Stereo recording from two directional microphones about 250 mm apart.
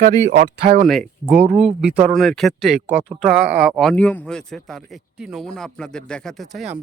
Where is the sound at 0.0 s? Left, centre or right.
Right.